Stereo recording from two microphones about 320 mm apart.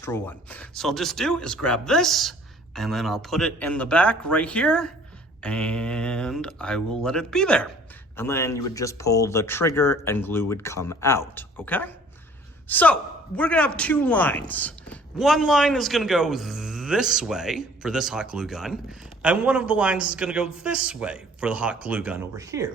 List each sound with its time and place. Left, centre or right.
0.0 s a man's voice: centre